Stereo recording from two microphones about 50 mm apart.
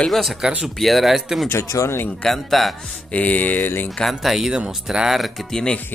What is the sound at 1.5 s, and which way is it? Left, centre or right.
Speech, left.